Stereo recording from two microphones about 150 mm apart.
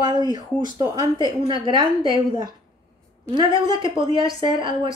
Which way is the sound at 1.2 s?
30° right (ahead or behind).